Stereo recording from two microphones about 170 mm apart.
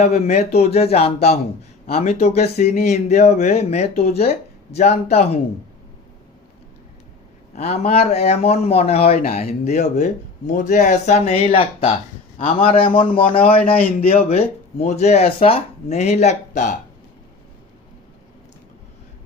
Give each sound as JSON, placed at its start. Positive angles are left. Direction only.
{"t": 0.0, "sound": "speech", "side_deg": 40}
{"t": 7.5, "sound": "speech", "side_deg": 40}